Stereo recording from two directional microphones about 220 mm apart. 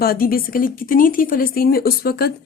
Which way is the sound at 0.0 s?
45° left (ahead or behind).